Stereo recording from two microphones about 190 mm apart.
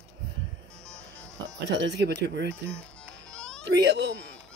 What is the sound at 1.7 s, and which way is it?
Speech, 60° right (ahead or behind).